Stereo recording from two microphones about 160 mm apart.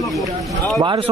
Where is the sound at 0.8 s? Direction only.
30° right (ahead or behind).